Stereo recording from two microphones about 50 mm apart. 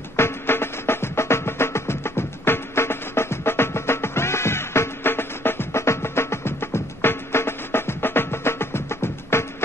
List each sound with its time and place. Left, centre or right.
0.1 s music: left